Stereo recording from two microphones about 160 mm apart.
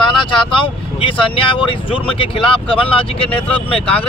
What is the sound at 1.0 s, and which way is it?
Speech, 35° left (ahead or behind).